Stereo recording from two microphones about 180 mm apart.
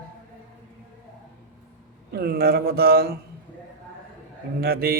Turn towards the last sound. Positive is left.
turn(degrees=-55)  # may be behind; listen again after turning